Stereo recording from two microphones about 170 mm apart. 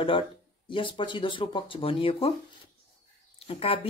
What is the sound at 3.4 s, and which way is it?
Speech, 35° left (ahead or behind).